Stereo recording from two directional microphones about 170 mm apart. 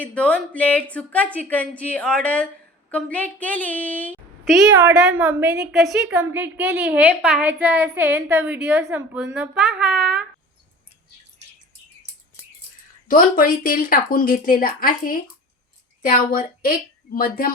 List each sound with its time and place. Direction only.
0.0 s a woman's voice: 10° left (ahead or behind)
6.3 s a woman's voice: 10° right (ahead or behind)
13.1 s a woman's voice: 55° left (ahead or behind)